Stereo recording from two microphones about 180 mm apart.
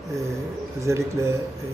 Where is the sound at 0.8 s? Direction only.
15° right (ahead or behind).